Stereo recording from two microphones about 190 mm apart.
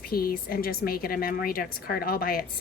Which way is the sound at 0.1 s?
50° left (ahead or behind).